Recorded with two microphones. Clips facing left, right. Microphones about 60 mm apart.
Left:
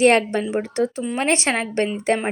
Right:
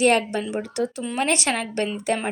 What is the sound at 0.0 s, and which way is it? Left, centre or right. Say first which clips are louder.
Speech: left 3 dB; left.